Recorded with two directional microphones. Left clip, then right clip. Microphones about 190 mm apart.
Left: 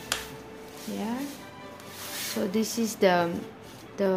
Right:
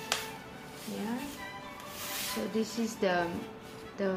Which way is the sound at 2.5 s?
35° left (ahead or behind).